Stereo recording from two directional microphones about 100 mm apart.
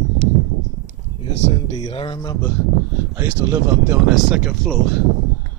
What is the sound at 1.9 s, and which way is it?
Speech, 70° left (ahead or behind).